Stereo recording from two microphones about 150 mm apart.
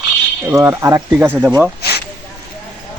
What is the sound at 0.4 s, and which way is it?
Speech, 20° right (ahead or behind).